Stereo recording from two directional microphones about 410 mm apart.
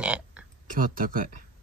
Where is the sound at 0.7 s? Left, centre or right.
Centre.